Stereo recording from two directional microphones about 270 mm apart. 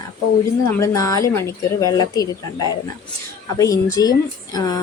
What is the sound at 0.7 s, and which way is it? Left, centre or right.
Speech, centre.